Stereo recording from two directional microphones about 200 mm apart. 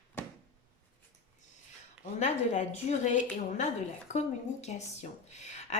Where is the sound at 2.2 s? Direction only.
35° left (ahead or behind).